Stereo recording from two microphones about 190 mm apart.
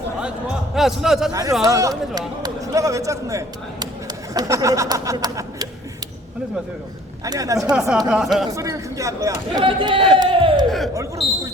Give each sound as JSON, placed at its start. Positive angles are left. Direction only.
{"t": 0.8, "sound": "a man's voice", "side_deg": 0}
{"t": 1.3, "sound": "a man's voice", "side_deg": -20}
{"t": 7.3, "sound": "speech", "side_deg": -15}
{"t": 7.7, "sound": "a man's voice", "side_deg": -5}
{"t": 8.4, "sound": "speech", "side_deg": -15}
{"t": 10.2, "sound": "a sound", "side_deg": -25}
{"t": 11.2, "sound": "speech", "side_deg": 25}